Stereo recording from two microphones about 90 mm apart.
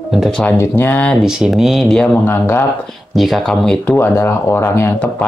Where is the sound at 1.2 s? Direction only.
5° right (ahead or behind).